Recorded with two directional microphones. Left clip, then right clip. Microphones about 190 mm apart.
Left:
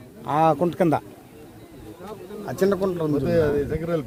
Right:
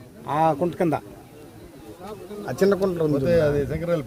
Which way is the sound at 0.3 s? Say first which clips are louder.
Left 2 dB; 55° left (ahead or behind).